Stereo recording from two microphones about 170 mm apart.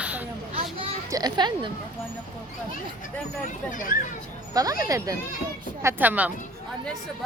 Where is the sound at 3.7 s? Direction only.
50° left (ahead or behind).